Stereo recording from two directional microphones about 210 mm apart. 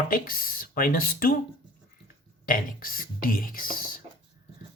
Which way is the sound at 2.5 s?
40° left (ahead or behind).